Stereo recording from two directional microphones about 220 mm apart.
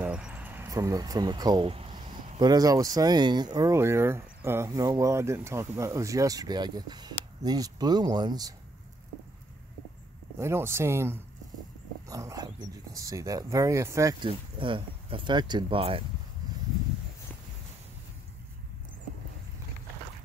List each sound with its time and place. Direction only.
0.0 s speech: 5° right (ahead or behind)
10.3 s speech: 10° right (ahead or behind)
16.4 s a sound: 15° right (ahead or behind)